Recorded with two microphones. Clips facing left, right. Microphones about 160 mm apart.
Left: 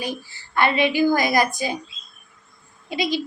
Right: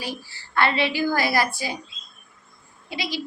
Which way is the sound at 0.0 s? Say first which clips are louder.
Left 4 dB; 20° left (ahead or behind).